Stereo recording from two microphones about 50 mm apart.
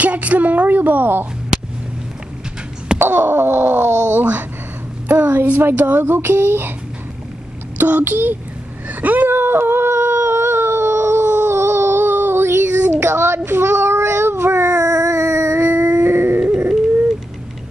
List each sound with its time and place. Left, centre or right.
0.0 s speech: right
3.0 s speech: right
4.1 s a sound: right
5.6 s speech: right
7.7 s a child's voice: right
9.0 s a sound: right
13.0 s child singing: right
15.6 s dog: right
16.4 s music: right